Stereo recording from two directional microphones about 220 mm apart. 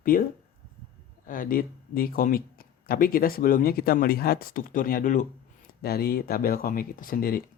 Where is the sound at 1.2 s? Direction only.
40° left (ahead or behind).